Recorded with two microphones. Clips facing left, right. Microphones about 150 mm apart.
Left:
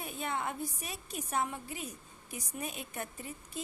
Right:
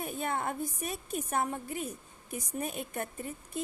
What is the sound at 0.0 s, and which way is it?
A woman's voice, 50° right (ahead or behind).